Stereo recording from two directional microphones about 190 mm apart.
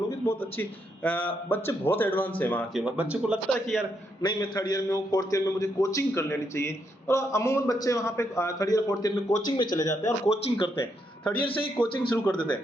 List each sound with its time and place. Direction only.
0.3 s a man's voice: 10° left (ahead or behind)
2.7 s a man's voice: 5° right (ahead or behind)
4.2 s a man's voice: 20° left (ahead or behind)
10.2 s speech: 30° left (ahead or behind)
10.8 s speech: 5° left (ahead or behind)
11.4 s speech: 30° left (ahead or behind)
11.8 s a man's voice: 10° left (ahead or behind)
12.3 s speech: 25° left (ahead or behind)